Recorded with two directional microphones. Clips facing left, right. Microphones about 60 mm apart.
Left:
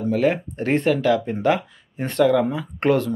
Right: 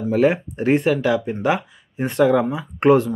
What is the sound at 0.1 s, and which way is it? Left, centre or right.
Speech, right.